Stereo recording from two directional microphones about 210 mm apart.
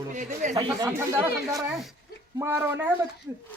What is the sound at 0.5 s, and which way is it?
Speech, 15° right (ahead or behind).